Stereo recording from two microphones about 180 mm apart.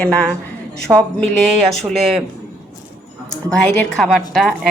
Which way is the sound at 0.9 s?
10° right (ahead or behind).